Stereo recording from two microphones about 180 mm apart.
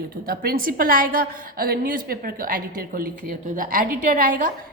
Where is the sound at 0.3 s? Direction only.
55° right (ahead or behind).